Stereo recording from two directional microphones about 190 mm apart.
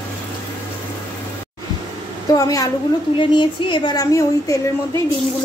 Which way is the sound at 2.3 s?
15° left (ahead or behind).